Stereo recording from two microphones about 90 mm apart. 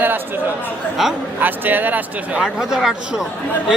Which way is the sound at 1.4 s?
20° right (ahead or behind).